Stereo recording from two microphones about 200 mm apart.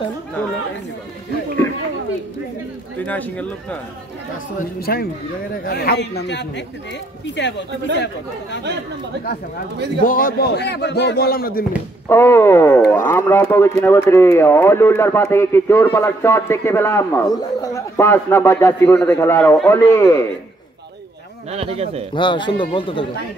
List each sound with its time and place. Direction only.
3.1 s speech: 10° left (ahead or behind)
4.6 s speech: 50° left (ahead or behind)
10.0 s speech: 45° left (ahead or behind)
12.1 s speech: 10° left (ahead or behind)
21.5 s speech: 30° right (ahead or behind)
22.1 s a man's voice: 25° left (ahead or behind)